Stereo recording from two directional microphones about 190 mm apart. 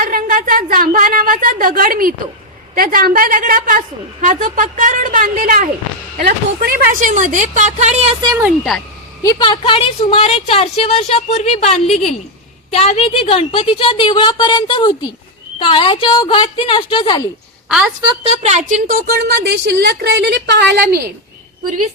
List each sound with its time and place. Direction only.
0.0 s a woman's voice: 50° right (ahead or behind)
8.4 s speech: 5° right (ahead or behind)
9.2 s a woman's voice: 20° left (ahead or behind)
17.7 s a woman's voice: 5° right (ahead or behind)
18.0 s speech: 30° right (ahead or behind); by 21.0 s 60° right (ahead or behind)